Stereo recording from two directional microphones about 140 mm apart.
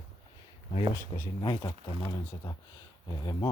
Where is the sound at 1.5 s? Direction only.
35° left (ahead or behind).